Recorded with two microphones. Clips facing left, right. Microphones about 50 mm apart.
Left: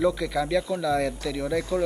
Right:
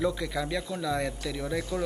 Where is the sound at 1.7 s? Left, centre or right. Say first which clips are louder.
Left 6 dB; left.